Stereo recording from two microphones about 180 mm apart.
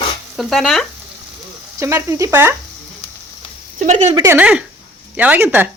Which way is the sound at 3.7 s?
40° right (ahead or behind).